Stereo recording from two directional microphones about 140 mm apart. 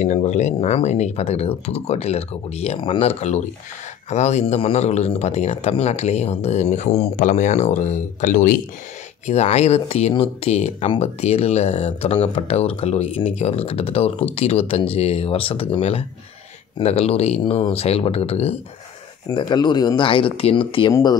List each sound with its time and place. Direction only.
0.0 s speech: 55° left (ahead or behind); by 8.5 s 70° left (ahead or behind)
9.2 s speech: 50° left (ahead or behind)
19.3 s speech: 30° left (ahead or behind)
20.9 s speech: 30° left (ahead or behind)